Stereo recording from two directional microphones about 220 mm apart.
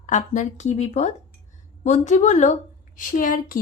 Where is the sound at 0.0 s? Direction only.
35° left (ahead or behind).